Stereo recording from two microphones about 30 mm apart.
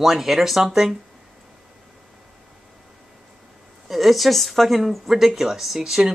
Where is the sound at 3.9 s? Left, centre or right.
Centre.